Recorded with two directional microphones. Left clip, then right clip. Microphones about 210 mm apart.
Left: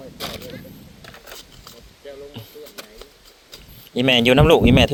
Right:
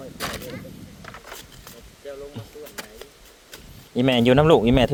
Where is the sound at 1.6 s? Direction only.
Centre (ahead or behind).